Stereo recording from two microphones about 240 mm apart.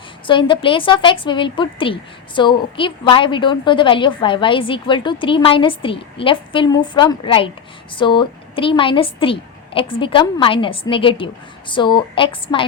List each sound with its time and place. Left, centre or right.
0.3 s a woman's voice: centre